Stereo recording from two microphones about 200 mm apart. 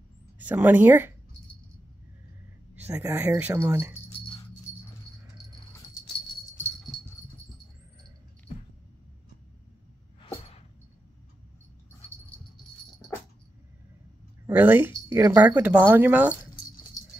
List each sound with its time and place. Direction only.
0.4 s speech: 10° right (ahead or behind)
2.7 s speech: 10° right (ahead or behind)
14.4 s speech: 10° right (ahead or behind)